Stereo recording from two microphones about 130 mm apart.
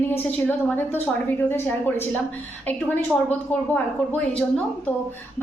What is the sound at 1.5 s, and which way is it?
Speech, 15° left (ahead or behind).